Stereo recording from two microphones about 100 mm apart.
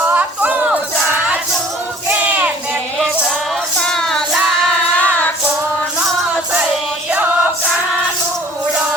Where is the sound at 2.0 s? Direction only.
15° right (ahead or behind).